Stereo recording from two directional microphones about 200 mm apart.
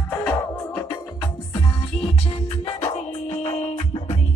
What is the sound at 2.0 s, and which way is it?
Music, 25° left (ahead or behind).